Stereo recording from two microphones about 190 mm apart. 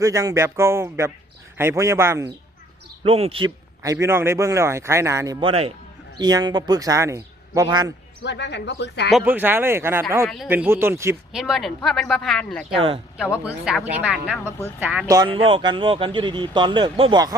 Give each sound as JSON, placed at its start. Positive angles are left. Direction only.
{"t": 0.0, "sound": "speech", "side_deg": -15}
{"t": 3.0, "sound": "speech", "side_deg": -30}
{"t": 3.8, "sound": "speech", "side_deg": -15}
{"t": 8.2, "sound": "speech", "side_deg": 65}
{"t": 9.1, "sound": "speech", "side_deg": -10}
{"t": 10.2, "sound": "speech", "side_deg": 0}
{"t": 11.3, "sound": "speech", "side_deg": 0}
{"t": 12.7, "sound": "speech", "side_deg": -30}
{"t": 13.4, "sound": "speech", "side_deg": -5}
{"t": 14.3, "sound": "speech", "side_deg": 10}
{"t": 14.8, "sound": "speech", "side_deg": -5}
{"t": 15.0, "sound": "speech", "side_deg": -20}